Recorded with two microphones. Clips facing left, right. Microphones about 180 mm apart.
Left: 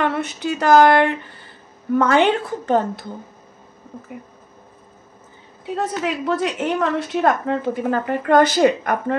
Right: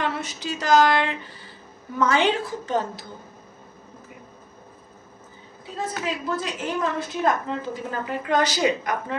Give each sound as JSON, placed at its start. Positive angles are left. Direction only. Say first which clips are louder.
{"t": 0.0, "sound": "speech", "louder": "left 6 dB", "side_deg": 60}
{"t": 5.8, "sound": "a woman's voice", "louder": "left 5 dB", "side_deg": 70}